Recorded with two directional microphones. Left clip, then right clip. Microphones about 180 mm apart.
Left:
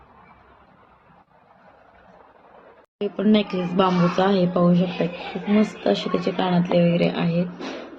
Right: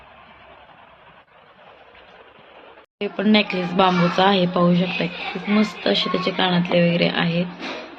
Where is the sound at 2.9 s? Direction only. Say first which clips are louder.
Right 2 dB; centre (ahead or behind).